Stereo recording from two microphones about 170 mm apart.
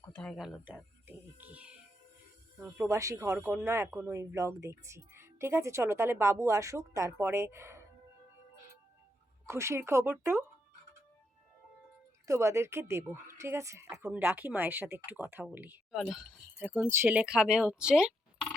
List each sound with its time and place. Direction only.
0.1 s speech: 5° left (ahead or behind); by 7.9 s 15° right (ahead or behind)
9.5 s speech: 15° right (ahead or behind)
12.3 s speech: 15° right (ahead or behind)